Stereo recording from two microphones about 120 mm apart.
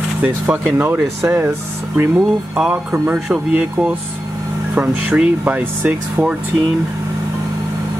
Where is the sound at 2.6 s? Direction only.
10° right (ahead or behind).